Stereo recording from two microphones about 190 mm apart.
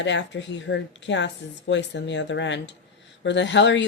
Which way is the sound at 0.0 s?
70° left (ahead or behind).